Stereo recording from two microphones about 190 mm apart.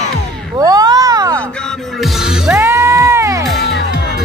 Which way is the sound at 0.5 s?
20° right (ahead or behind).